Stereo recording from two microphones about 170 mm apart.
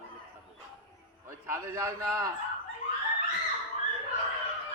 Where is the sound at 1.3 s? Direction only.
15° right (ahead or behind).